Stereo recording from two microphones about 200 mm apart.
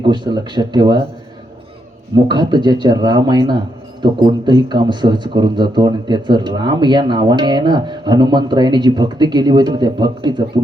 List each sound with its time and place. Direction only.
0.0 s a man's voice: 25° right (ahead or behind)
2.1 s a man's voice: 20° right (ahead or behind)